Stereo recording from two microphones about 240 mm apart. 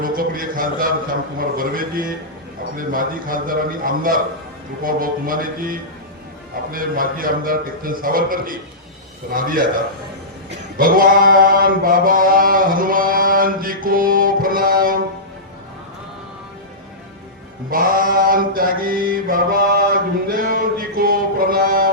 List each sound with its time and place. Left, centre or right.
0.0 s a man's voice: right
10.5 s mantra: right
17.7 s mantra: right